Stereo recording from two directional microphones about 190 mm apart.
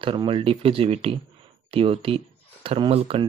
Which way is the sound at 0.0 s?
25° right (ahead or behind).